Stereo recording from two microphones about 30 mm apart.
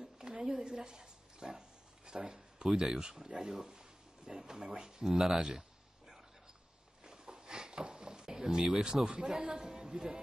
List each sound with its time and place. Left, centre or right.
0.4 s speech: right
5.4 s a sound: right
8.6 s speech: centre